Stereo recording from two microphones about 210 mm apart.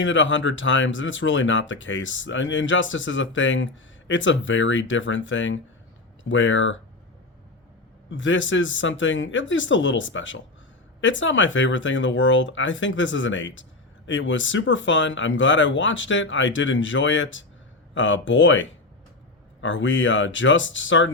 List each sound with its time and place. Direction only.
0.0 s speech: 65° left (ahead or behind)
8.1 s speech: 65° left (ahead or behind)